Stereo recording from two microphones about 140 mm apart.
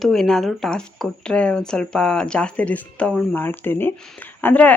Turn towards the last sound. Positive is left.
turn(degrees=10)  # may be behind; listen again after turning